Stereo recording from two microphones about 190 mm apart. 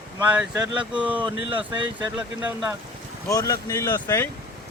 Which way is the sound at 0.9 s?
5° right (ahead or behind).